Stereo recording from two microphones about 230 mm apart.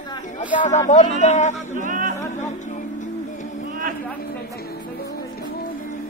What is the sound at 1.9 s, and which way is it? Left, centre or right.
Music, right.